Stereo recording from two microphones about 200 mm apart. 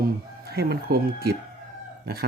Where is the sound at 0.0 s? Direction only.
50° right (ahead or behind).